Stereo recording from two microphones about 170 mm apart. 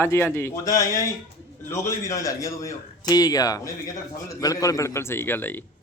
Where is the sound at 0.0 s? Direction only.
15° left (ahead or behind).